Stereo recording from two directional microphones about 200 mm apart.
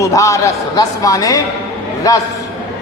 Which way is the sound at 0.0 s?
15° left (ahead or behind).